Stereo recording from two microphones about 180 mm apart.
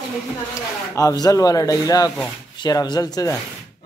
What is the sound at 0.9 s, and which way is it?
A man's voice, 20° left (ahead or behind).